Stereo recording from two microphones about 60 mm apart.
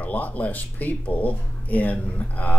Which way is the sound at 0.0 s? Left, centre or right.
Left.